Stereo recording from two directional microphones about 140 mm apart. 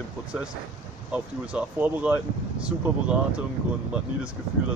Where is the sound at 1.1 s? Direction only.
10° right (ahead or behind).